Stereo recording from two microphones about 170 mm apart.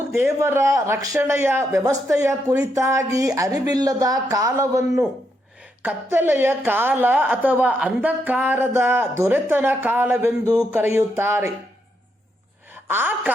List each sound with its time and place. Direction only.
0.1 s a woman's voice: 15° right (ahead or behind)
12.7 s a woman's voice: 10° right (ahead or behind)